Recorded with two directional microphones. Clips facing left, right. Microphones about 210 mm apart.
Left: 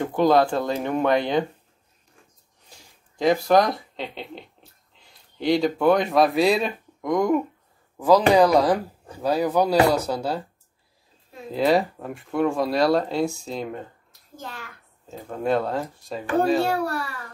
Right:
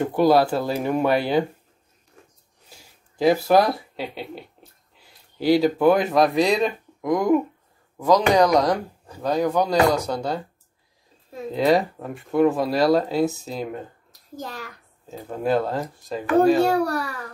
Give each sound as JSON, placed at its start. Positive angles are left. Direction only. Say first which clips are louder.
{"t": 0.0, "sound": "speech", "louder": "right 1 dB", "side_deg": -5}
{"t": 2.7, "sound": "speech", "louder": "right 1 dB", "side_deg": -5}
{"t": 11.5, "sound": "speech", "louder": "right 1 dB", "side_deg": 0}
{"t": 14.3, "sound": "a child's voice", "louder": "right 4 dB", "side_deg": -40}
{"t": 15.0, "sound": "speech", "louder": "right 1 dB", "side_deg": -5}